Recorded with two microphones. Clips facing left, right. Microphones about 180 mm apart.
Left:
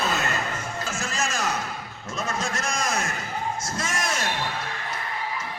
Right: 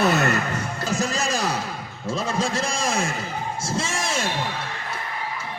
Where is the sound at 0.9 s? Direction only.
35° right (ahead or behind).